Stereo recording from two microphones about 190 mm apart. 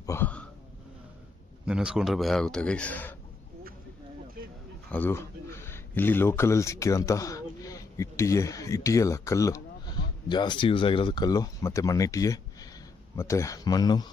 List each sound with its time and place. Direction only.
0.0 s hiccup: 10° left (ahead or behind)
1.7 s speech: 5° right (ahead or behind)
4.9 s speech: 10° left (ahead or behind)